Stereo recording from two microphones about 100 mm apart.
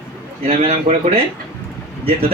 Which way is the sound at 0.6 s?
80° right.